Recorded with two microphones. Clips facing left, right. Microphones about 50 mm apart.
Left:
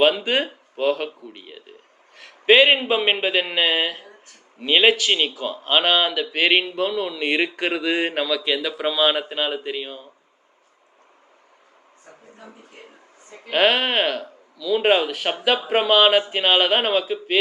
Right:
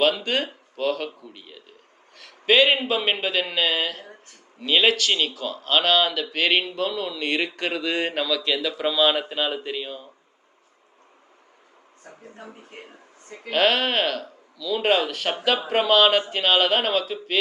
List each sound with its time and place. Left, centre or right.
0.0 s speech: centre
13.5 s speech: centre